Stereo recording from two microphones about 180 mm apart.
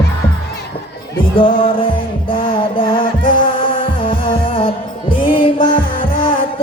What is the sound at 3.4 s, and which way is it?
Heart sounds, 30° left (ahead or behind).